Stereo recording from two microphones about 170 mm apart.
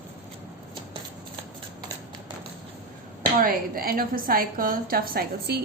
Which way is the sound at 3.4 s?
60° right (ahead or behind).